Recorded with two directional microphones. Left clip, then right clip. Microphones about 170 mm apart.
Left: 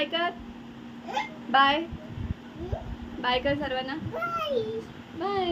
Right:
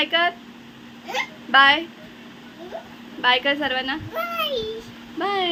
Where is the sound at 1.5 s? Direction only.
10° right (ahead or behind).